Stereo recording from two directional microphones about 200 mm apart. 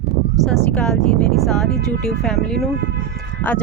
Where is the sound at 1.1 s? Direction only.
Centre (ahead or behind).